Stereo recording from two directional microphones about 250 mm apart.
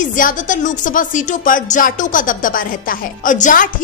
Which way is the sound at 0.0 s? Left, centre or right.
Left.